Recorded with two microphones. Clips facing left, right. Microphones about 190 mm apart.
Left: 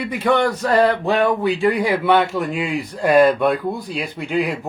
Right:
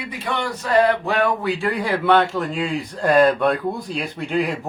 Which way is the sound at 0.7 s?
30° left (ahead or behind).